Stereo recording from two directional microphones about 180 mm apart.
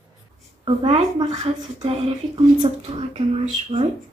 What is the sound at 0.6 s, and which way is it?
A woman's voice, 30° right (ahead or behind).